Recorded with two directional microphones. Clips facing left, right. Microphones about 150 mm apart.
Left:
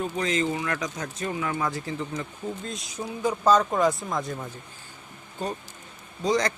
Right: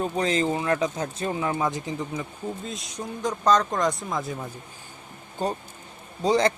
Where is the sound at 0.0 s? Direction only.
35° right (ahead or behind); by 2.2 s 15° right (ahead or behind).